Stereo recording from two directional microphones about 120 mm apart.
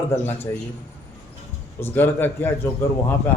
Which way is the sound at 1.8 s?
20° left (ahead or behind).